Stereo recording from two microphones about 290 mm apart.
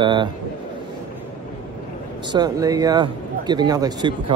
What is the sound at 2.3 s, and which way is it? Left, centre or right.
Speech, centre.